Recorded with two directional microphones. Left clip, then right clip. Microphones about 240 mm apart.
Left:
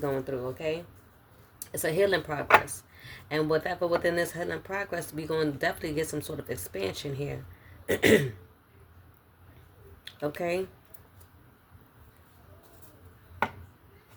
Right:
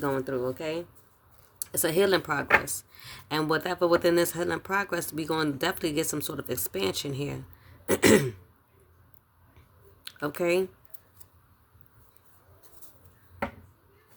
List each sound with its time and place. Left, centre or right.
0.0 s speech: right
10.0 s speech: right